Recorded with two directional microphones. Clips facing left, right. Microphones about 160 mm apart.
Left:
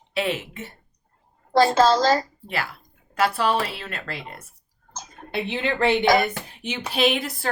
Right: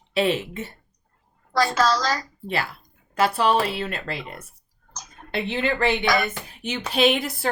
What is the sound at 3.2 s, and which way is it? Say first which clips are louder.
Speech: right 2 dB; 20° right (ahead or behind).